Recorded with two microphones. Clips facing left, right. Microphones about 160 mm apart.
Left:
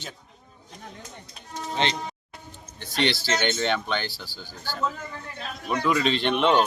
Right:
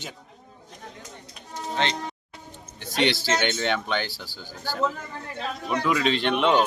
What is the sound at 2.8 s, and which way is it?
Speech, 15° right (ahead or behind).